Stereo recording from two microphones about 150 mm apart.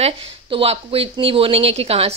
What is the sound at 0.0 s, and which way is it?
A woman's voice, 40° right (ahead or behind).